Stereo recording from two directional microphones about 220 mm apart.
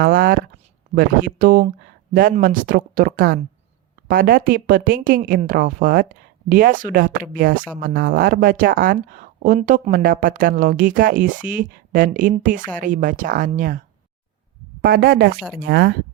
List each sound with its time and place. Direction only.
0.0 s speech: 40° right (ahead or behind)